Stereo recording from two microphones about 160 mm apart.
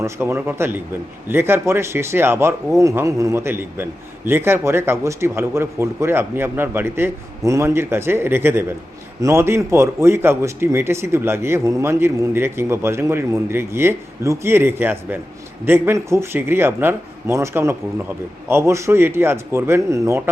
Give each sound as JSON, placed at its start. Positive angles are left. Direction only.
{"t": 0.0, "sound": "speech", "side_deg": -15}